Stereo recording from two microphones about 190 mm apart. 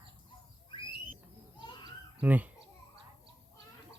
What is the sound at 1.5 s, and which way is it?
Children playing, 20° left (ahead or behind).